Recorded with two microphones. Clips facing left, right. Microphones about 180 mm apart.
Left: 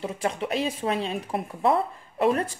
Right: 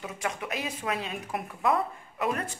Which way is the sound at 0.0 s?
30° left (ahead or behind).